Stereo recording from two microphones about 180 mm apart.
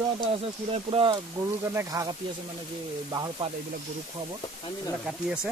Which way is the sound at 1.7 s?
20° right (ahead or behind).